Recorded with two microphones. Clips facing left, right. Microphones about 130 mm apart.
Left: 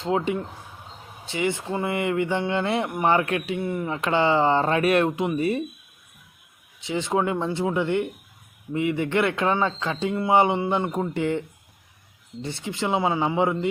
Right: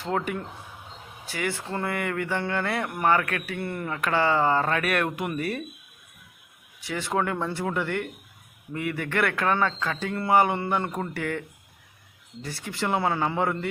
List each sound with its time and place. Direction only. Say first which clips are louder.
0.0 s speech: left 4 dB; 20° left (ahead or behind)
1.6 s speech: left 3 dB; 10° left (ahead or behind)
1.9 s speech: left 5 dB; 20° left (ahead or behind)
6.7 s speech: left 3 dB; 20° left (ahead or behind)